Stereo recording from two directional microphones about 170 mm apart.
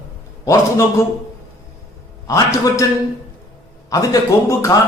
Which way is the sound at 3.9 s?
20° left (ahead or behind).